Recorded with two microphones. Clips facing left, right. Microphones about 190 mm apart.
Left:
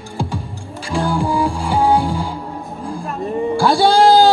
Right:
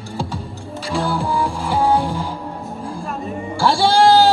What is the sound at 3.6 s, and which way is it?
Music, 15° left (ahead or behind).